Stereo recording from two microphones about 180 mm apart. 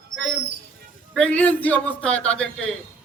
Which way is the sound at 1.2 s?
5° left (ahead or behind).